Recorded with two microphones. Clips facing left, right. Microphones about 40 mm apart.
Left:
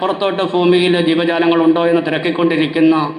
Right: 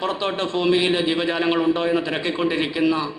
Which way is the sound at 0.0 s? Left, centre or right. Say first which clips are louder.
Left 8 dB; left.